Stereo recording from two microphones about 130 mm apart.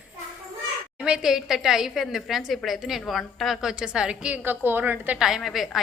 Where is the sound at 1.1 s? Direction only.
5° right (ahead or behind).